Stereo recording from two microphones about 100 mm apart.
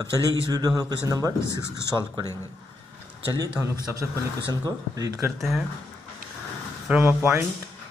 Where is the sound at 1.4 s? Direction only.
25° left (ahead or behind).